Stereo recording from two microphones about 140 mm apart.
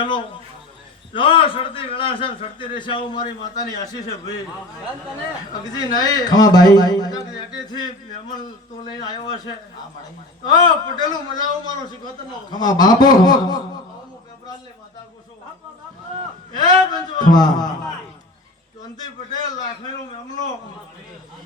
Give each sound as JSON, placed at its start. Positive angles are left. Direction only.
{"t": 0.0, "sound": "a man's voice", "side_deg": 35}
{"t": 5.7, "sound": "a man's voice", "side_deg": 30}
{"t": 8.9, "sound": "a man's voice", "side_deg": 30}
{"t": 10.6, "sound": "a man's voice", "side_deg": 30}
{"t": 16.6, "sound": "a man's voice", "side_deg": 30}
{"t": 18.9, "sound": "a man's voice", "side_deg": 30}